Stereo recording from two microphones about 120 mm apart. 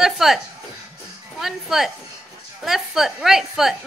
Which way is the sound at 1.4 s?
Centre (ahead or behind).